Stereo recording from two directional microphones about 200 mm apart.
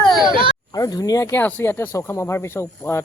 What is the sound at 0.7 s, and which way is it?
Speech, 20° left (ahead or behind).